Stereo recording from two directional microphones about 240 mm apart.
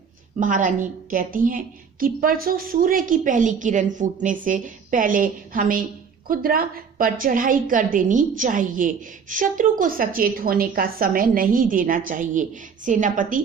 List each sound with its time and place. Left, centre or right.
0.3 s a woman's voice: right